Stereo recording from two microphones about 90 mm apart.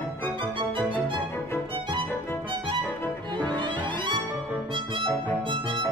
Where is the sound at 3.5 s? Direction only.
65° right (ahead or behind).